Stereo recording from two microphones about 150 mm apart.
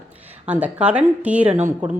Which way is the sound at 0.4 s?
10° right (ahead or behind).